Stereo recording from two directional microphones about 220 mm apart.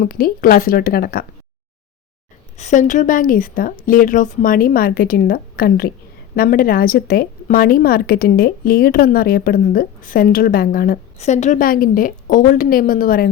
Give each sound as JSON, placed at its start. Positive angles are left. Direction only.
{"t": 0.0, "sound": "a woman's voice", "side_deg": 40}
{"t": 2.6, "sound": "a woman's voice", "side_deg": 35}